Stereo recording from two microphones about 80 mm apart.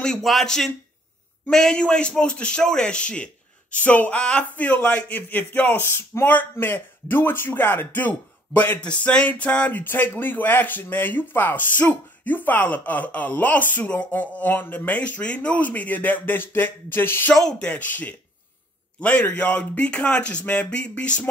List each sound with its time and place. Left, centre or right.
0.0 s a man's voice: centre; by 17.3 s left
17.3 s speech: centre